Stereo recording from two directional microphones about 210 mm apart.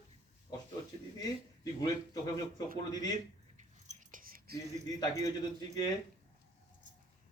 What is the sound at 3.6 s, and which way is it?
Keys jangling, 35° right (ahead or behind).